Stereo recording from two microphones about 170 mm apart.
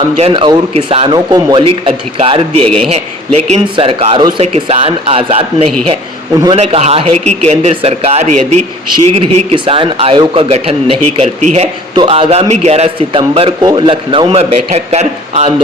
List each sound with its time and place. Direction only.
0.2 s speech: 30° right (ahead or behind)
2.6 s a man's voice: 5° left (ahead or behind)
3.5 s speech: 35° right (ahead or behind)